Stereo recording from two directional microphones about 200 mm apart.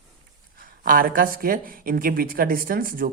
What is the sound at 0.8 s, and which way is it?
A woman's voice, 45° right (ahead or behind).